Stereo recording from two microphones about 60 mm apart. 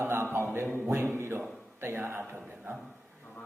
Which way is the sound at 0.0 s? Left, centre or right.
Right.